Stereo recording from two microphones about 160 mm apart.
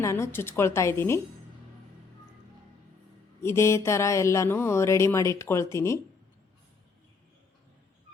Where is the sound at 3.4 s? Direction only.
15° left (ahead or behind).